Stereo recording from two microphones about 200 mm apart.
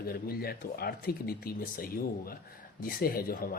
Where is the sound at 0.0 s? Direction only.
50° left (ahead or behind).